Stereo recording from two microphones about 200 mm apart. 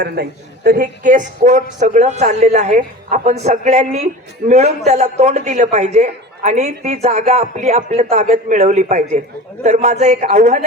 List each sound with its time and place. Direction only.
0.0 s a woman's voice: 50° right (ahead or behind)